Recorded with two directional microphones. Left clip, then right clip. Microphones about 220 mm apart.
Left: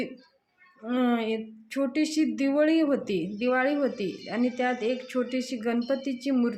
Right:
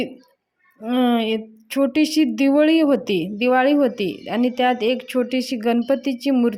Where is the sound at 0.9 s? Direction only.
35° right (ahead or behind).